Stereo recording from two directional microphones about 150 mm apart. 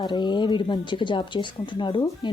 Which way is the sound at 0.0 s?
30° left (ahead or behind).